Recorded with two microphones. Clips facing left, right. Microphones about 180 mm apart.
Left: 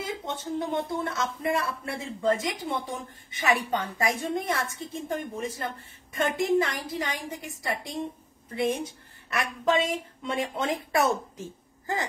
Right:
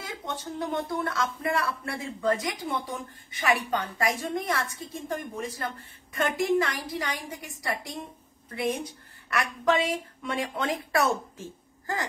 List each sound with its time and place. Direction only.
0.0 s speech: 20° left (ahead or behind)